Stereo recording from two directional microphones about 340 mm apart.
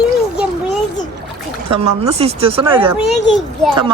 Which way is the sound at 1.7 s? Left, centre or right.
Centre.